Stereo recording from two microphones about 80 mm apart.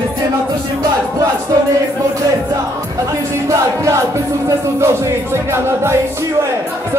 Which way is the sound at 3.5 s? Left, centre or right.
Right.